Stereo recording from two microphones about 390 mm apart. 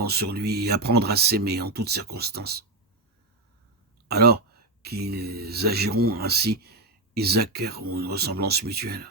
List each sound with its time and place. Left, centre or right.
0.0 s speech: right
4.1 s speech: right